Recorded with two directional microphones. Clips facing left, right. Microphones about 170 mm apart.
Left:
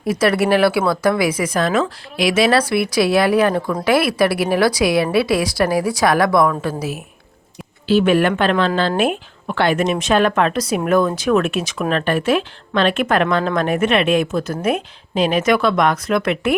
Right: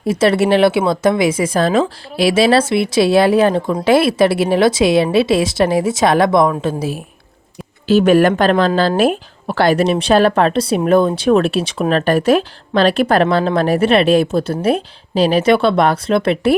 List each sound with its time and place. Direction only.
0.0 s speech: 25° right (ahead or behind)
7.9 s speech: 40° right (ahead or behind)